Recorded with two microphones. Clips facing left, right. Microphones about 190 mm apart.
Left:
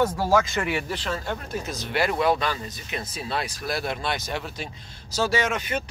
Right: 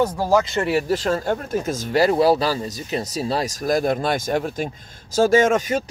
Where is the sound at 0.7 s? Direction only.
40° right (ahead or behind).